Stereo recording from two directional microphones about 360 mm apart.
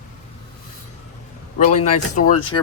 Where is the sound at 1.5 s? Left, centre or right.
Centre.